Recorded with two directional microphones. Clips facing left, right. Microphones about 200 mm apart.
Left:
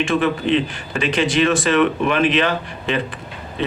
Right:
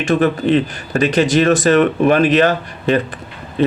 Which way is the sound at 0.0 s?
40° right (ahead or behind).